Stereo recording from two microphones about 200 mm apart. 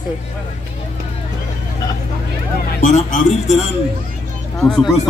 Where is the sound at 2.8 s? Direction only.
40° left (ahead or behind).